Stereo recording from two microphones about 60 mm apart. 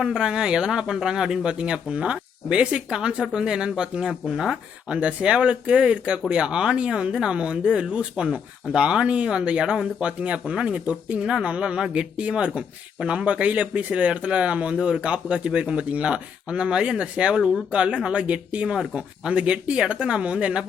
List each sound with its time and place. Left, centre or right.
0.0 s speech: centre